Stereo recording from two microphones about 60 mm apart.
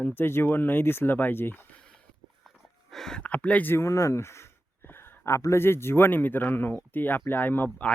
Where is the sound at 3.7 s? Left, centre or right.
Left.